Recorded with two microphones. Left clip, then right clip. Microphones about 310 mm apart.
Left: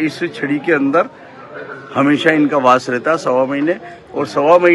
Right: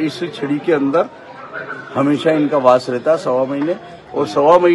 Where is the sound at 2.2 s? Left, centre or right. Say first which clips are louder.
Right 1 dB; centre.